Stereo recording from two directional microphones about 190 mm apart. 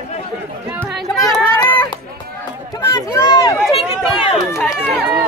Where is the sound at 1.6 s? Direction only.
25° left (ahead or behind).